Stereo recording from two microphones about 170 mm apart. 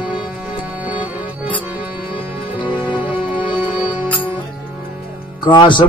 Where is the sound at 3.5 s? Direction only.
10° right (ahead or behind).